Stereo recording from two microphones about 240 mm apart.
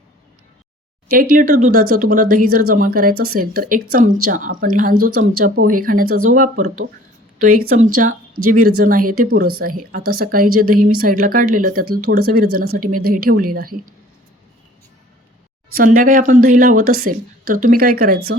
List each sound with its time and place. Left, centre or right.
1.1 s speech: right
5.1 s a woman's voice: right
5.4 s speech: right
15.7 s speech: right